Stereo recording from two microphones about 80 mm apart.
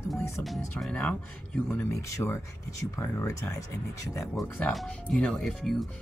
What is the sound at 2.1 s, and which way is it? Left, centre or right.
Speech, left.